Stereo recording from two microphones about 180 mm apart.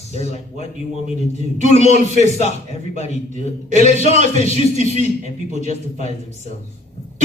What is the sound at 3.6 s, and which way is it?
Speech, 40° right (ahead or behind).